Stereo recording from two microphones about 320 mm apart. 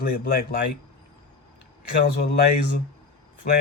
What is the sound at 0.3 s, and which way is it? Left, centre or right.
Speech, left.